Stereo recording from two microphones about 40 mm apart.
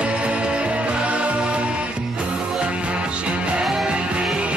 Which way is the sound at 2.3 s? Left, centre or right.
Centre.